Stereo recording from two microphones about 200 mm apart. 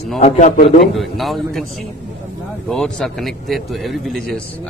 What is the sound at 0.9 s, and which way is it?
Speech, centre (ahead or behind).